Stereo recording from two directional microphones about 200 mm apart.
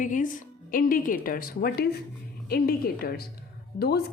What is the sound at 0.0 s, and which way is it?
A woman's voice, 40° left (ahead or behind).